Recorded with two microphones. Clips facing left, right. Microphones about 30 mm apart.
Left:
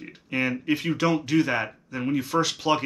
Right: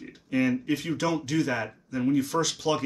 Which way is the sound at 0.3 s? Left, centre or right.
Left.